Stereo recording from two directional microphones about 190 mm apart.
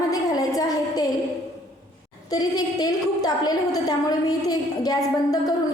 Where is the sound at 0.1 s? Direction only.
20° left (ahead or behind).